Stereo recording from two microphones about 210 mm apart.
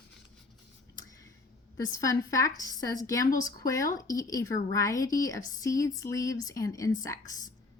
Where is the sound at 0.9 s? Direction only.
15° left (ahead or behind).